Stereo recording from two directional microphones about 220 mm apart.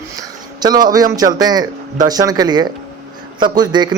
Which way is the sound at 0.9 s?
15° right (ahead or behind).